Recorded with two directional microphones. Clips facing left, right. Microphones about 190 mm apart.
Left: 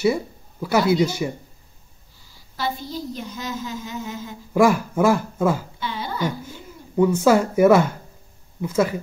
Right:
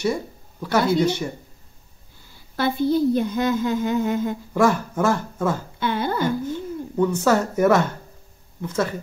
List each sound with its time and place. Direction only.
0.0 s a sound: 10° left (ahead or behind)
1.0 s speech: 5° left (ahead or behind)
2.2 s a woman's voice: 55° right (ahead or behind)
4.6 s speech: 10° left (ahead or behind)
5.8 s a woman's voice: 55° right (ahead or behind)
7.0 s speech: 10° left (ahead or behind)